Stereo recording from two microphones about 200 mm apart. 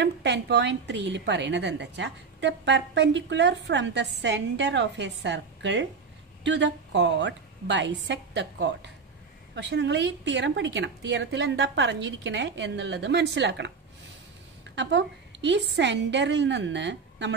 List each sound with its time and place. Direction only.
0.0 s a woman's voice: 60° right (ahead or behind)
14.8 s a woman's voice: 60° right (ahead or behind)